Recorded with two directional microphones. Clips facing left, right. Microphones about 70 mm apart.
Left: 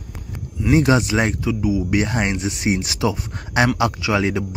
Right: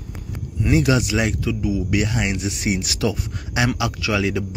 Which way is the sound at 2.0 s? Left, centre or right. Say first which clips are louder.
Left 2 dB; left.